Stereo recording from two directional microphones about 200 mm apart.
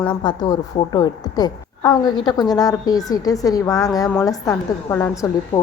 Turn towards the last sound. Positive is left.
turn(degrees=15)  # may be behind; listen again after turning